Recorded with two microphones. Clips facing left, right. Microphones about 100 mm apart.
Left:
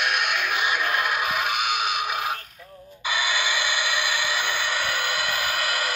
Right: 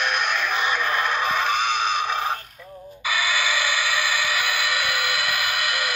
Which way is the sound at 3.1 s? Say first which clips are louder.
Right 2 dB; 20° left (ahead or behind).